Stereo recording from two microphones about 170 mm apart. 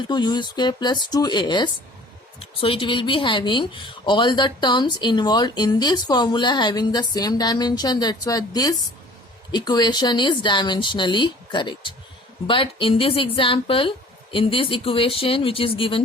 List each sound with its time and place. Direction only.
0.1 s speech: 25° left (ahead or behind)